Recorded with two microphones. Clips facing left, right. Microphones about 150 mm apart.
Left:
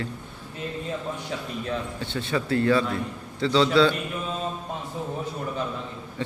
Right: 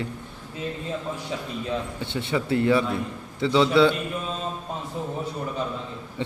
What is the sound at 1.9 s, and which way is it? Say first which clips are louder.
A man's voice: right 1 dB; 20° right (ahead or behind).